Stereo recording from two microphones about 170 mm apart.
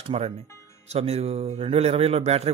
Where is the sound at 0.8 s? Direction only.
40° right (ahead or behind).